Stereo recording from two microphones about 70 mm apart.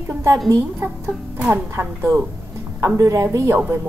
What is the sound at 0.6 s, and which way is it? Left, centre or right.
Speech, right.